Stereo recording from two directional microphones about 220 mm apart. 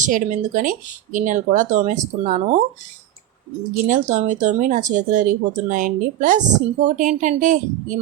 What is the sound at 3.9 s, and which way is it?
Speech, 35° right (ahead or behind).